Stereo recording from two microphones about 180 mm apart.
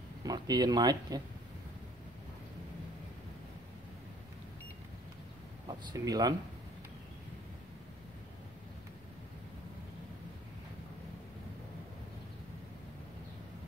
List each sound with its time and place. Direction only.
0.2 s speech: 20° right (ahead or behind)
5.7 s speech: 20° right (ahead or behind)